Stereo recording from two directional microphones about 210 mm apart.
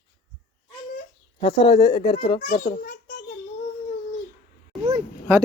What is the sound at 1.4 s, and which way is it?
Speech, 20° left (ahead or behind).